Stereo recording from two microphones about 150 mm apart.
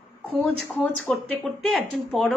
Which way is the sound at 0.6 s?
Centre (ahead or behind).